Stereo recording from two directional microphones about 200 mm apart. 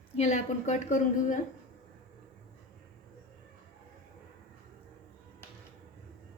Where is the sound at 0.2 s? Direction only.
35° left (ahead or behind).